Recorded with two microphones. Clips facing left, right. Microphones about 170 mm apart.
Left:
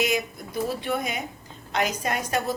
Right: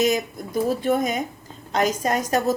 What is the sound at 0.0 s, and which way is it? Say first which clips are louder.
A woman's voice: right 4 dB; 45° right (ahead or behind).